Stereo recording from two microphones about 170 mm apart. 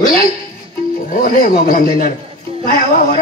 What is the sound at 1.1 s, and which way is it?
Speech, 55° left (ahead or behind).